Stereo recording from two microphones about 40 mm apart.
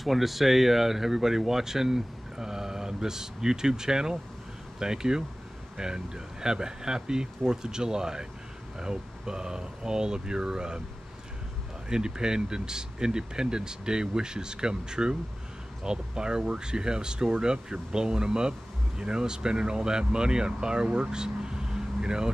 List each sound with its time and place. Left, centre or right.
0.0 s speech: centre
11.9 s speech: centre